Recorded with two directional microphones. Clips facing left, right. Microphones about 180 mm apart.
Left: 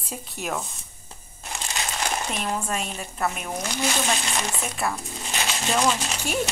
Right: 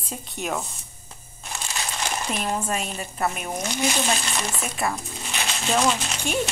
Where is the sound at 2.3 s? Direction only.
5° right (ahead or behind).